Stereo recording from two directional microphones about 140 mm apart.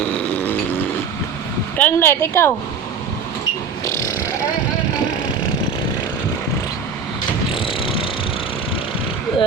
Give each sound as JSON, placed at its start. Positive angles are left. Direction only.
{"t": 0.3, "sound": "vehicle", "side_deg": 15}
{"t": 1.8, "sound": "a woman's voice", "side_deg": 15}
{"t": 3.8, "sound": "a sound", "side_deg": 20}
{"t": 7.5, "sound": "vehicle", "side_deg": 40}